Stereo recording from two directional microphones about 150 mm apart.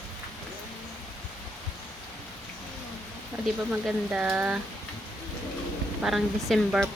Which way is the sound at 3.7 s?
10° right (ahead or behind).